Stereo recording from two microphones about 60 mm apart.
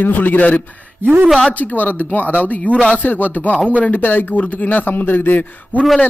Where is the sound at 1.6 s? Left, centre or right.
Left.